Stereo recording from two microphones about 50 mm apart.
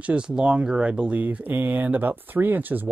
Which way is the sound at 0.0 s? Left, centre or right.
Right.